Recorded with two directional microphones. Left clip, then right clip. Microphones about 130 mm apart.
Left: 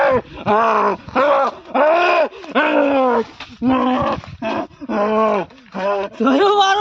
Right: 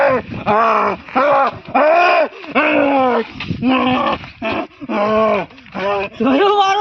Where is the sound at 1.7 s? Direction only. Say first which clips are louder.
Right 2 dB; 60° left (ahead or behind).